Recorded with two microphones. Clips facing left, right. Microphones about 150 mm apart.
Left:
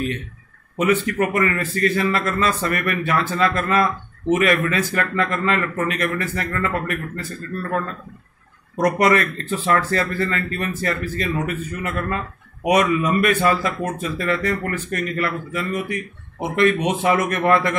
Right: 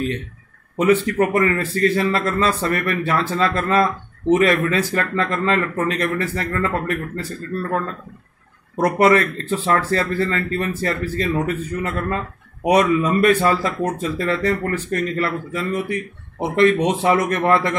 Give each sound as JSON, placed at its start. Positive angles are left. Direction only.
{"t": 0.7, "sound": "speech", "side_deg": -30}
{"t": 8.7, "sound": "speech", "side_deg": -25}